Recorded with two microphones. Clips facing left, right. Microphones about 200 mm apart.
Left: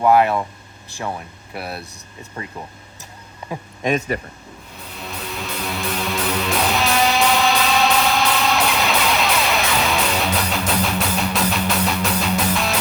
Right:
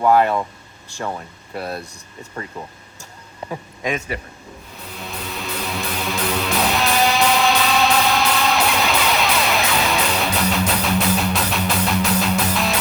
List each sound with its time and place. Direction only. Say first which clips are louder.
0.0 s speech: even; 10° left (ahead or behind)
4.1 s speech: left 4 dB; 45° left (ahead or behind)
4.9 s music: even; centre (ahead or behind)